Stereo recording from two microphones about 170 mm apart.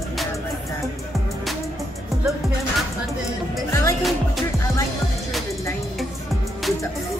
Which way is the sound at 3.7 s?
15° left (ahead or behind).